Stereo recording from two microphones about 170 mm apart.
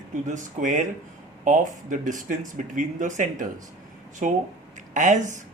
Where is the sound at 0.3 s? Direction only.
45° right (ahead or behind).